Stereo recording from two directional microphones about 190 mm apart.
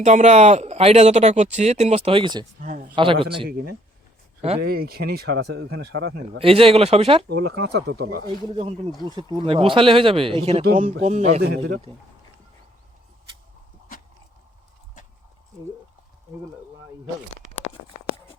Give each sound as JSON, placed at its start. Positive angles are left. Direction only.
{"t": 0.0, "sound": "speech", "side_deg": -40}
{"t": 2.6, "sound": "speech", "side_deg": -45}
{"t": 2.9, "sound": "speech", "side_deg": -25}
{"t": 4.4, "sound": "speech", "side_deg": -30}
{"t": 4.6, "sound": "speech", "side_deg": -50}
{"t": 6.4, "sound": "speech", "side_deg": -30}
{"t": 7.3, "sound": "speech", "side_deg": -60}
{"t": 8.5, "sound": "speech", "side_deg": -30}
{"t": 11.9, "sound": "speech", "side_deg": -20}